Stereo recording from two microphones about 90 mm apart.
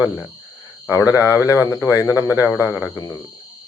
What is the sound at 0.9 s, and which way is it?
Speech, 35° left (ahead or behind).